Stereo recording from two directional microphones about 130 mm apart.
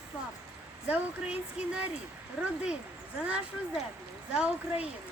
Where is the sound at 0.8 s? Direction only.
10° right (ahead or behind).